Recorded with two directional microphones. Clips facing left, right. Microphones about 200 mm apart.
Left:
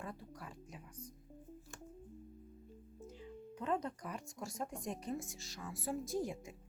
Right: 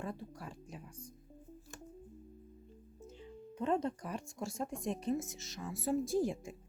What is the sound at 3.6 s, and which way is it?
Speech, 25° right (ahead or behind).